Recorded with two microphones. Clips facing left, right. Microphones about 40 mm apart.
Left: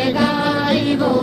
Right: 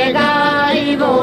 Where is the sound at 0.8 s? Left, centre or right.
Right.